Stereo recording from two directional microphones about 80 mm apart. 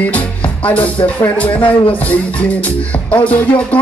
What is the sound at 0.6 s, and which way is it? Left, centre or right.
Speech, centre.